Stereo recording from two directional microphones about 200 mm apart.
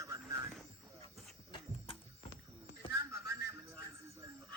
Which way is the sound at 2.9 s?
15° right (ahead or behind).